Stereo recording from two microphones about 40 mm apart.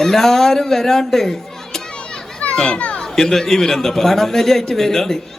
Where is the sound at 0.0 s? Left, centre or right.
Centre.